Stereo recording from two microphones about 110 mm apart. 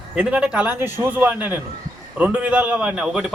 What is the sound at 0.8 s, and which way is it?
A man's voice, 20° right (ahead or behind).